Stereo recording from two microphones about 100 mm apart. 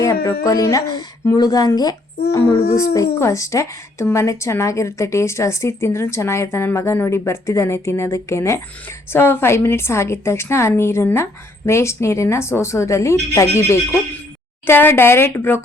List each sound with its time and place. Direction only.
0.0 s speech: 30° left (ahead or behind)
2.7 s a woman's voice: 30° left (ahead or behind)